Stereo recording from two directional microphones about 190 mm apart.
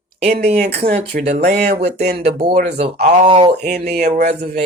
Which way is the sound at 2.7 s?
35° right (ahead or behind).